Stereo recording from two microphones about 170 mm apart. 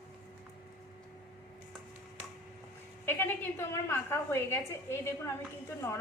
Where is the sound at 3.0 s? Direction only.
15° left (ahead or behind).